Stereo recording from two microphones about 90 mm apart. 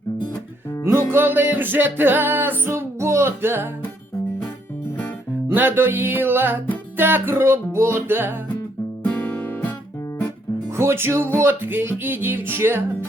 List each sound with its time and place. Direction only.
1.1 s music: 25° right (ahead or behind)
5.5 s music: 25° right (ahead or behind)
9.0 s music: 15° left (ahead or behind)
10.7 s music: 30° right (ahead or behind)